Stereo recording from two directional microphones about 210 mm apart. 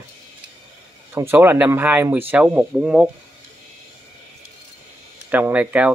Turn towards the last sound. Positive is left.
turn(degrees=-5)  # may be behind; listen again after turning